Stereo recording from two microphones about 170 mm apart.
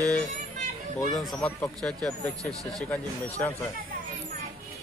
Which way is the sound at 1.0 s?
Centre (ahead or behind).